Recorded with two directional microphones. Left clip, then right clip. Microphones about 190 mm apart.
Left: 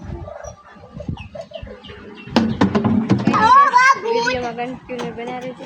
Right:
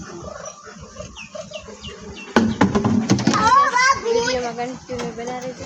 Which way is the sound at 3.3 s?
40° left (ahead or behind).